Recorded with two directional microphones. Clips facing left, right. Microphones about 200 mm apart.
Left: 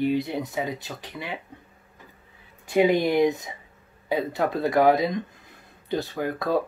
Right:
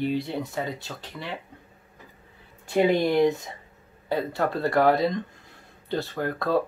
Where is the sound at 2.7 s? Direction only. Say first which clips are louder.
Left 1 dB; 10° left (ahead or behind).